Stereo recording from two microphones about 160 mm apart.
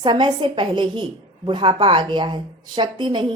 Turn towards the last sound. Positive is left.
turn(degrees=-30)  # may be behind; listen again after turning